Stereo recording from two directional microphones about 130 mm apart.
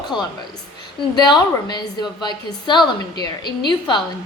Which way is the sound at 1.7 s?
35° left (ahead or behind).